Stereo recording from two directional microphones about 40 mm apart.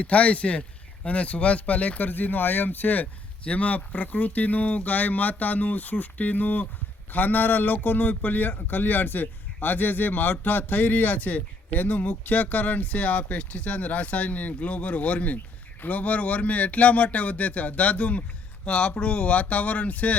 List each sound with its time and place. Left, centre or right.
0.0 s a man's voice: left
3.4 s a man's voice: left